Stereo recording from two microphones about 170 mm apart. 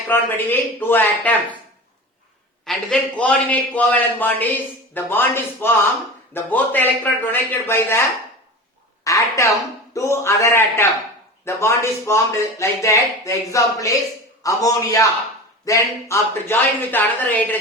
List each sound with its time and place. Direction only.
0.1 s a man's voice: 10° left (ahead or behind)
2.6 s a man's voice: 5° left (ahead or behind)
9.0 s a man's voice: 20° left (ahead or behind)